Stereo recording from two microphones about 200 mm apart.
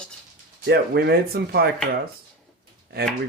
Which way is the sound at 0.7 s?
55° right (ahead or behind).